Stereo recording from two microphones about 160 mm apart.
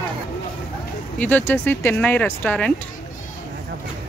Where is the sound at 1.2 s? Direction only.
10° left (ahead or behind).